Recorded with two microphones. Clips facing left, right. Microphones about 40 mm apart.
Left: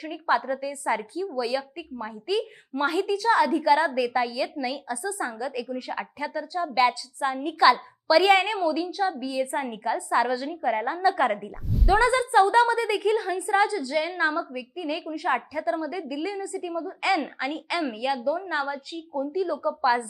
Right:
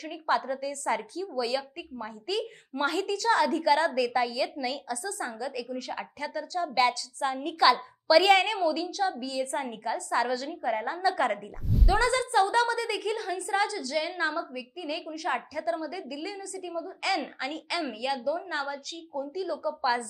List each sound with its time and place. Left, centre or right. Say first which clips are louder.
0.0 s a woman's voice: left 3 dB; centre
12.0 s a woman's voice: left 5 dB; centre